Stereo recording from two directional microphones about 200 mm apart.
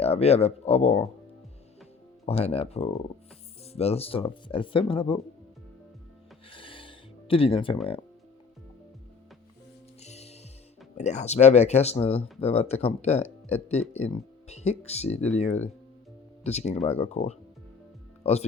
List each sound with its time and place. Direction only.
0.0 s speech: 30° left (ahead or behind)
2.2 s speech: 30° left (ahead or behind)
6.5 s music: 25° left (ahead or behind)
10.0 s music: 35° left (ahead or behind)
10.9 s speech: 35° left (ahead or behind)
18.2 s music: 30° left (ahead or behind)